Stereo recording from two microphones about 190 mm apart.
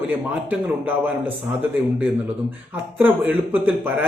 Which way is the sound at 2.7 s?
10° right (ahead or behind).